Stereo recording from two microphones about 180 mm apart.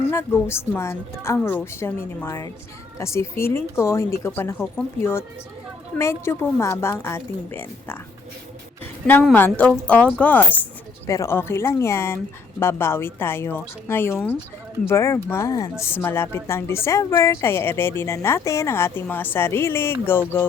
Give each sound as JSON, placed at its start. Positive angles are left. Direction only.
{"t": 0.1, "sound": "a woman's voice", "side_deg": 15}
{"t": 9.3, "sound": "a woman's voice", "side_deg": 10}